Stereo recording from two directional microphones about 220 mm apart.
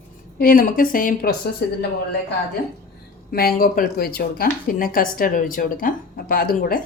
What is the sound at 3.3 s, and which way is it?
A woman's voice, 45° left (ahead or behind).